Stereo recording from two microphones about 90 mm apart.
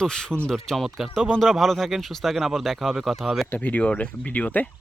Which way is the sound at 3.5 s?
15° left (ahead or behind).